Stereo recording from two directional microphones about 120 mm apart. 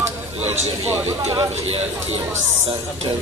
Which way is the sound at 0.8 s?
20° right (ahead or behind).